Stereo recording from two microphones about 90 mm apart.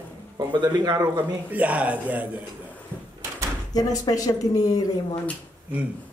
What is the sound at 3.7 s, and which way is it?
Speech, 45° left (ahead or behind).